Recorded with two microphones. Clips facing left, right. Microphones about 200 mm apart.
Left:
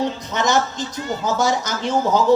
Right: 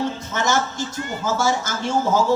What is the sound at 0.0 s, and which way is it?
Speech, 15° left (ahead or behind).